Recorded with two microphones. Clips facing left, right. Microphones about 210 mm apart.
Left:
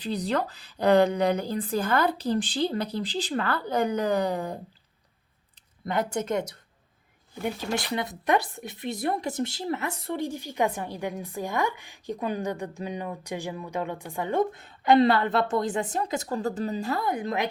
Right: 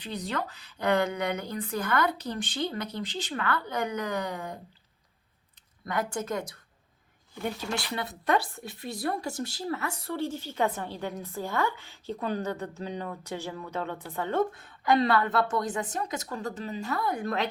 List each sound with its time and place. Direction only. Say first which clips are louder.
0.0 s speech: left 6 dB; 35° left (ahead or behind)
5.8 s speech: left 3 dB; 25° left (ahead or behind)
7.9 s speech: left 2 dB; 15° left (ahead or behind); by 17.0 s 40° left (ahead or behind)
17.0 s speech: left 2 dB; 20° left (ahead or behind)